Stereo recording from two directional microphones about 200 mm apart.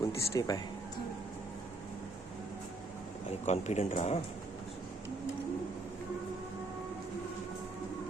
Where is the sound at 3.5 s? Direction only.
35° left (ahead or behind).